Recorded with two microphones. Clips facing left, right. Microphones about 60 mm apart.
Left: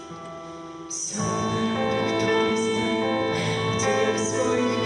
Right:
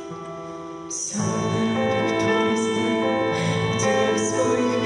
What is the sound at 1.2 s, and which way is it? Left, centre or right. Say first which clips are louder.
Music: right 2 dB; centre.